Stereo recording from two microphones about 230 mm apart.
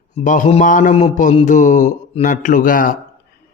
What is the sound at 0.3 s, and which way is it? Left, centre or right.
A man's voice, left.